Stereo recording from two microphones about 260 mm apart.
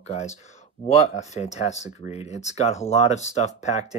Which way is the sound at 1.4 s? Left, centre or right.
Left.